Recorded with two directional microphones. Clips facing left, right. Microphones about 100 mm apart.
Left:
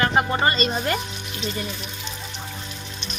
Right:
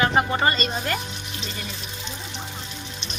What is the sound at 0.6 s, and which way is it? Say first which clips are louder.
Speech: left 3 dB; 15° left (ahead or behind).